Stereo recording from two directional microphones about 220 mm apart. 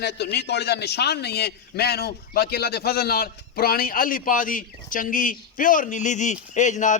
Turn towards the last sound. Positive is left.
turn(degrees=35)  # may be behind; listen again after turning